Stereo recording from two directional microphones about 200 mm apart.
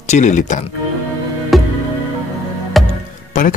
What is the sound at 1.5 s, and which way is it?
Music, centre (ahead or behind).